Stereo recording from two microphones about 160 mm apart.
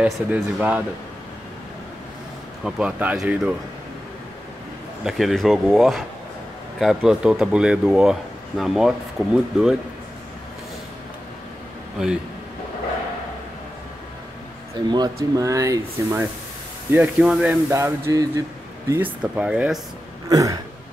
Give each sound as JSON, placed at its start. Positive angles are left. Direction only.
{"t": 0.0, "sound": "speech", "side_deg": -10}
{"t": 2.6, "sound": "speech", "side_deg": -10}
{"t": 5.0, "sound": "speech", "side_deg": 0}
{"t": 14.9, "sound": "speech", "side_deg": -25}
{"t": 17.6, "sound": "speech", "side_deg": -15}
{"t": 20.2, "sound": "speech", "side_deg": -20}